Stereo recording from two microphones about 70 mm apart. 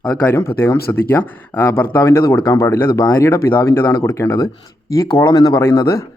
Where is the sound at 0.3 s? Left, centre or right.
Left.